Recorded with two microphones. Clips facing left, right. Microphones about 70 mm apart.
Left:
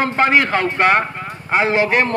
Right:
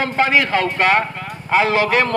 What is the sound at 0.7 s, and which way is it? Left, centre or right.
Speech, left.